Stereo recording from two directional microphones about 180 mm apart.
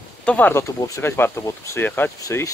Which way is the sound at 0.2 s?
10° left (ahead or behind).